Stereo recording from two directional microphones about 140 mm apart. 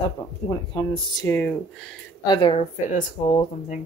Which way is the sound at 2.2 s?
35° left (ahead or behind).